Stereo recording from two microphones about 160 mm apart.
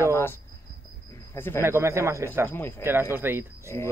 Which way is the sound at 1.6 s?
15° right (ahead or behind).